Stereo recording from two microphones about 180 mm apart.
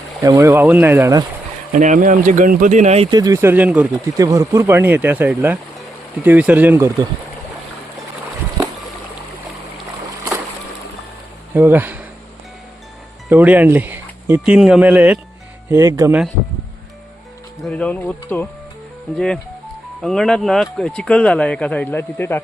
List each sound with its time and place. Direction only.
0.2 s speech: 15° right (ahead or behind)
1.7 s speech: 45° right (ahead or behind)
3.1 s speech: 20° right (ahead or behind)
4.2 s speech: 20° right (ahead or behind)
11.5 s speech: 10° right (ahead or behind)
13.2 s speech: 10° right (ahead or behind)
17.6 s speech: 5° left (ahead or behind)